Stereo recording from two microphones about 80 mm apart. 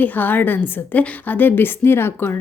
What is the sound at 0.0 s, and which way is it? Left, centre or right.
A woman's voice, left.